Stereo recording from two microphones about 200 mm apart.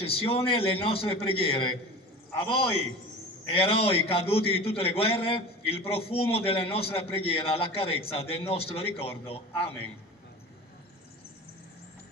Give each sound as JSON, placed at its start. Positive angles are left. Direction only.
{"t": 0.0, "sound": "a man's voice", "side_deg": 30}